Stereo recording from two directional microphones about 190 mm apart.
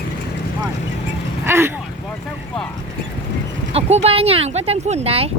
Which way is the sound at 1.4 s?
15° right (ahead or behind).